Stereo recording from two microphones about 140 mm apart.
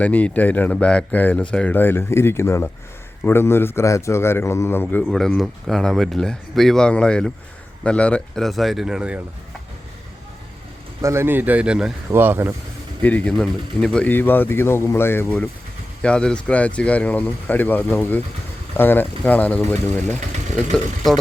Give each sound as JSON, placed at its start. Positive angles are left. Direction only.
{"t": 0.0, "sound": "speech", "side_deg": 10}
{"t": 5.0, "sound": "speech", "side_deg": 0}
{"t": 11.0, "sound": "a man's voice", "side_deg": -20}
{"t": 12.1, "sound": "a man's voice", "side_deg": -15}
{"t": 13.0, "sound": "speech", "side_deg": 10}